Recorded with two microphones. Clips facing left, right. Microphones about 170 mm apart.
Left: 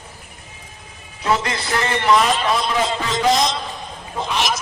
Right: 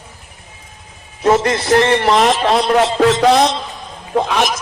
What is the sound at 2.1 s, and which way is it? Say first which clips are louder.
A man's voice: right 5 dB; 70° right (ahead or behind).